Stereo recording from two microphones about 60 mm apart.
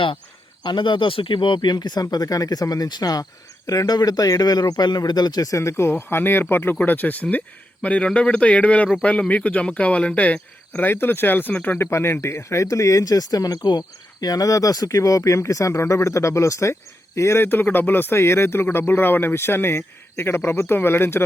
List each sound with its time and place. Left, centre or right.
2.0 s speech: left
10.8 s speech: left
11.9 s speech: left
17.5 s speech: left